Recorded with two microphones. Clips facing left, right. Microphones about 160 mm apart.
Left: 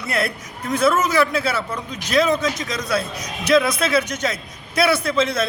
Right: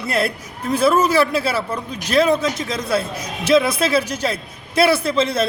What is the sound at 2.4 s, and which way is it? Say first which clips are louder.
A man's voice: right 2 dB; 30° right (ahead or behind).